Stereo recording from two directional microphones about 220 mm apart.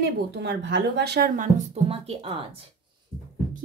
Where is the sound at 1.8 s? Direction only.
25° right (ahead or behind).